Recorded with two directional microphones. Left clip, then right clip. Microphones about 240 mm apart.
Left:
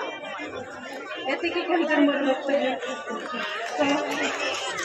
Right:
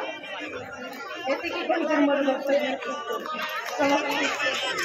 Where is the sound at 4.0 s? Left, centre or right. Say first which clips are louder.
Right 1 dB; centre.